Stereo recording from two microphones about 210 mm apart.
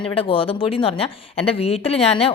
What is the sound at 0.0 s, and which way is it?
Speech, 25° left (ahead or behind).